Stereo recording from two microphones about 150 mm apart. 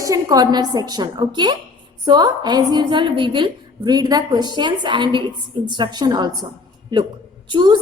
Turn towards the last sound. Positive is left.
turn(degrees=-30)  # may be behind; listen again after turning